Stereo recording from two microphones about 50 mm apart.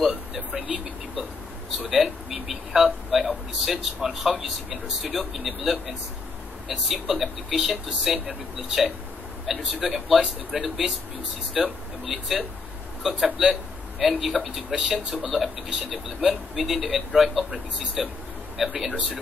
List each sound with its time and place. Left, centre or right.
0.5 s vehicle: right
1.9 s a sound: centre
3.5 s speech: centre